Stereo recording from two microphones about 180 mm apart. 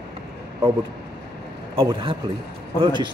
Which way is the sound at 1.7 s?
30° right (ahead or behind).